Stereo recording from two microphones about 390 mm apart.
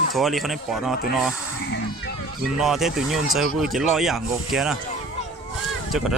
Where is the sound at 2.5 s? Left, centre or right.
Centre.